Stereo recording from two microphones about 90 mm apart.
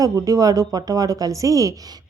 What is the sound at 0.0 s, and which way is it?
A woman's voice, 40° right (ahead or behind).